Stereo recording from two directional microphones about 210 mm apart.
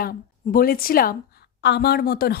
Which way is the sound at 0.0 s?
45° left (ahead or behind).